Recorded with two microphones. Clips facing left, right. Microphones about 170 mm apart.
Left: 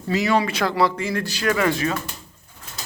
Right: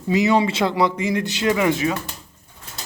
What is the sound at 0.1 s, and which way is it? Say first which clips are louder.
A man's voice: right 3 dB; 20° right (ahead or behind).